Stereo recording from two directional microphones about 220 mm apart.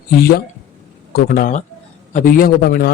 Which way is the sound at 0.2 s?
45° left (ahead or behind).